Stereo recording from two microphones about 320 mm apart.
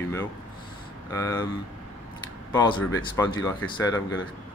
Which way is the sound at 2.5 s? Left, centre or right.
Centre.